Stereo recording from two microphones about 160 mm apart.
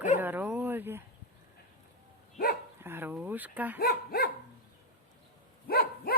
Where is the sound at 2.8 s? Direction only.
15° right (ahead or behind).